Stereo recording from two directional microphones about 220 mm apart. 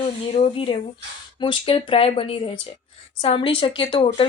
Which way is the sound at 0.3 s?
25° left (ahead or behind).